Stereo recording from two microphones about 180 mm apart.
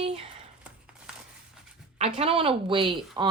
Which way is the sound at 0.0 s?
35° right (ahead or behind).